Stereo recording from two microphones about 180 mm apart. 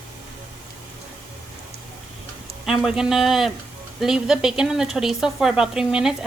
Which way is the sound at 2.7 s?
5° right (ahead or behind).